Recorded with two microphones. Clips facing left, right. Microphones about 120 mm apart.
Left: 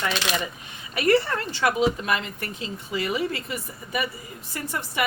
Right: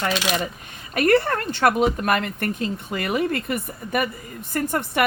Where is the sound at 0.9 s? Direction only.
50° right (ahead or behind).